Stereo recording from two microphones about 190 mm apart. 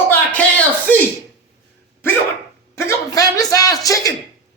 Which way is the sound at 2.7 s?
15° left (ahead or behind).